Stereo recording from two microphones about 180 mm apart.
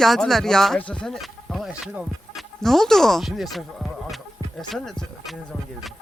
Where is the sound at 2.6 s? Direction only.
Centre (ahead or behind).